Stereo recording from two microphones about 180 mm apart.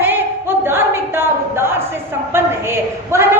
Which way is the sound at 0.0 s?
10° right (ahead or behind).